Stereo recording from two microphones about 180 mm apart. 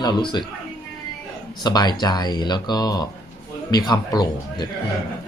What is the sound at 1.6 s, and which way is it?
Speech, 20° left (ahead or behind).